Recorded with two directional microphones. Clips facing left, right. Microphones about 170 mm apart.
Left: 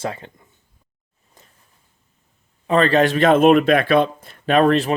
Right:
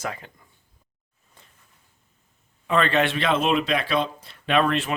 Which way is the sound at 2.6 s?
35° left (ahead or behind).